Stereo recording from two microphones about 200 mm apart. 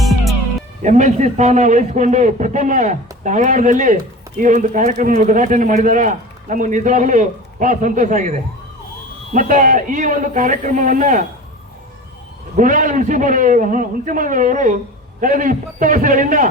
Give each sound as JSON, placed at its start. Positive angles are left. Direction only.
{"t": 0.0, "sound": "music", "side_deg": 0}
{"t": 0.8, "sound": "speech", "side_deg": -35}
{"t": 12.5, "sound": "speech", "side_deg": -40}